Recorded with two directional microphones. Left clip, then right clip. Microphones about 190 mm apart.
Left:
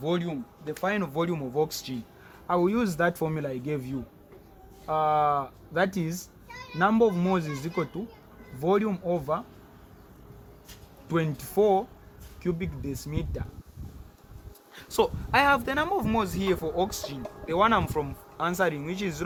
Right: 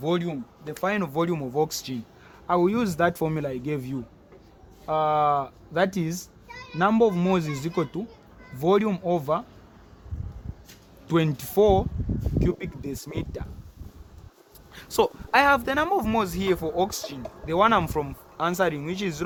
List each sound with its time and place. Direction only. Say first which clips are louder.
0.0 s speech: right 3 dB; 35° right (ahead or behind)
11.1 s speech: right 4 dB; 35° right (ahead or behind)
14.8 s speech: right 2 dB; 30° right (ahead or behind)